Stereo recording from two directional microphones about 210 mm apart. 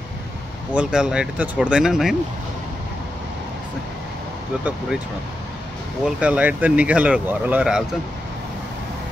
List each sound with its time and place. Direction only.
0.7 s speech: 5° right (ahead or behind)
4.6 s speech: 5° right (ahead or behind)
6.0 s speech: 5° right (ahead or behind)